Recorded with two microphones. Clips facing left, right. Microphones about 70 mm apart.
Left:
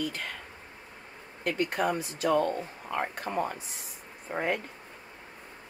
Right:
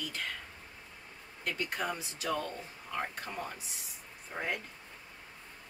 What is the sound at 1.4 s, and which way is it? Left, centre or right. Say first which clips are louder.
Speech: left 7 dB; left.